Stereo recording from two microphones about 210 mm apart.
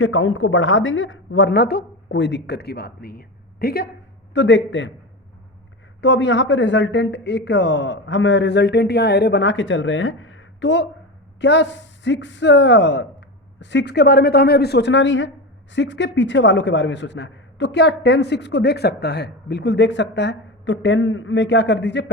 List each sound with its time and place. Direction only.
0.0 s a man's voice: 75° left (ahead or behind); by 3.8 s 45° left (ahead or behind)
4.4 s a man's voice: 60° left (ahead or behind)
6.0 s a man's voice: 60° left (ahead or behind)